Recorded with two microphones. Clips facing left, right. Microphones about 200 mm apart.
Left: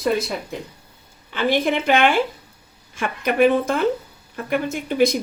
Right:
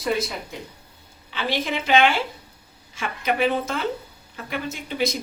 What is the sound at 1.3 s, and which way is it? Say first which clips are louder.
A woman's voice: left 6 dB; 50° left (ahead or behind).